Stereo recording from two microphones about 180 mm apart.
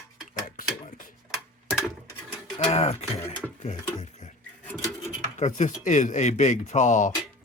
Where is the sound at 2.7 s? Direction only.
35° left (ahead or behind).